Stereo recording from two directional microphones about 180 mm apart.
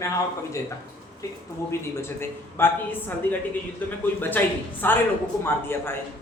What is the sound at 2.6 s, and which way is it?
Speech, 10° left (ahead or behind).